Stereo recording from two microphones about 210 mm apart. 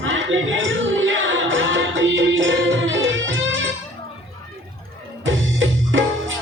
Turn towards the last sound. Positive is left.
turn(degrees=-65)  # may be behind; listen again after turning